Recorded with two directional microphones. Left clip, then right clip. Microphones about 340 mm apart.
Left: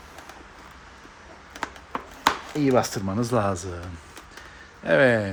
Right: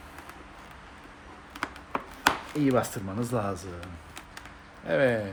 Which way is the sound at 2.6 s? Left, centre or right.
Left.